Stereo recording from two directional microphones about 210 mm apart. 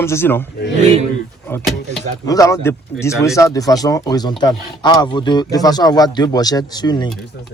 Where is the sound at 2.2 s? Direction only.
15° left (ahead or behind).